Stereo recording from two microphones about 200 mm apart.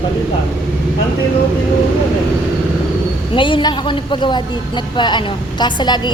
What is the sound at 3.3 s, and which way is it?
A woman's voice, 25° left (ahead or behind).